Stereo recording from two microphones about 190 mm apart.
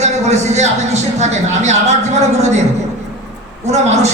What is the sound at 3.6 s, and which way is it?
Speech, 35° right (ahead or behind).